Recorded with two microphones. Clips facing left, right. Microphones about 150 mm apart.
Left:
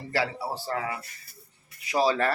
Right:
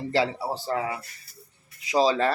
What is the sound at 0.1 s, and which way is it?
Speech, 20° right (ahead or behind).